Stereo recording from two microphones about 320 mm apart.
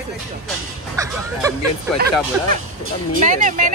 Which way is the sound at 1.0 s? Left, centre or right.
Centre.